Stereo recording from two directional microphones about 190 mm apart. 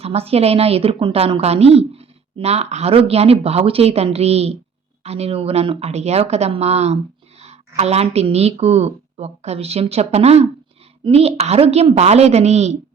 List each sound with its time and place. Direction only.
0.0 s a woman's voice: 30° right (ahead or behind)